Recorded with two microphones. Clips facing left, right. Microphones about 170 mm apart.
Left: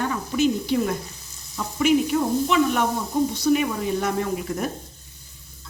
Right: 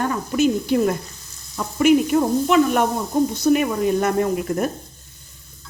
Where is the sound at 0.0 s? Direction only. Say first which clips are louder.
Right 3 dB; 45° right (ahead or behind).